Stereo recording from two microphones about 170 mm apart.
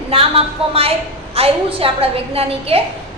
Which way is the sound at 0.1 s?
35° right (ahead or behind).